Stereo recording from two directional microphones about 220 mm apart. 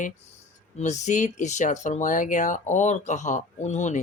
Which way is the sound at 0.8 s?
35° left (ahead or behind).